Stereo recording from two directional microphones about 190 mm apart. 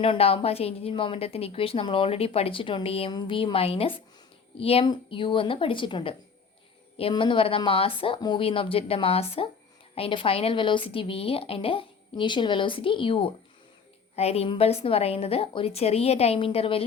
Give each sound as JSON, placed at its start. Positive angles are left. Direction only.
{"t": 0.0, "sound": "a woman's voice", "side_deg": 30}